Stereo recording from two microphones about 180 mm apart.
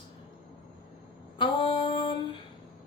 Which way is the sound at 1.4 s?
30° left (ahead or behind).